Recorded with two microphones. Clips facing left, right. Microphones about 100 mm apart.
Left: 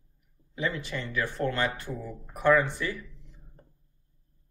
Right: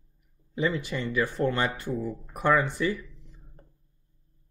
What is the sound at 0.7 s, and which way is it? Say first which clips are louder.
Speech: right 4 dB; 15° right (ahead or behind).